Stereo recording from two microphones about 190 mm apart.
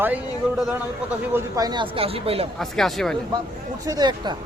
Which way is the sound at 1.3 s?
20° right (ahead or behind).